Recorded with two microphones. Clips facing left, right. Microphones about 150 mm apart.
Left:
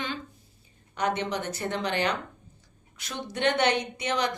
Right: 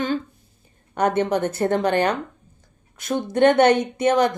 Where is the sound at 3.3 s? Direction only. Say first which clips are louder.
Right 10 dB; 50° right (ahead or behind).